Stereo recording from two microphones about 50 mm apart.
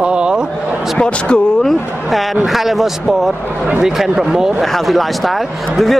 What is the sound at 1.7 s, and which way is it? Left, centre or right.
Speech, centre.